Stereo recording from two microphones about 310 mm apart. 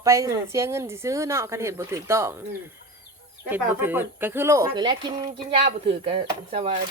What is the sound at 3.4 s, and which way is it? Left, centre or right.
A woman's voice, centre.